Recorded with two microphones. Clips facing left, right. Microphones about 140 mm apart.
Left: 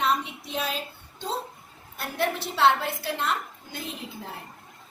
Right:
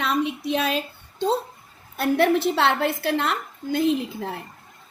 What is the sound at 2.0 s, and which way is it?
A woman's voice, 75° right (ahead or behind).